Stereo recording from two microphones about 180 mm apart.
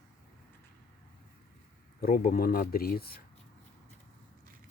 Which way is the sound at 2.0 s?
55° left (ahead or behind).